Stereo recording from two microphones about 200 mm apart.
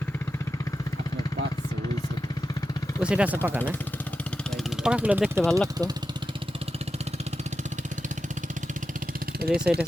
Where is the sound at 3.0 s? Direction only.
5° right (ahead or behind).